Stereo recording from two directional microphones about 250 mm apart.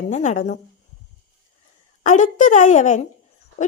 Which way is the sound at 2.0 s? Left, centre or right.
Left.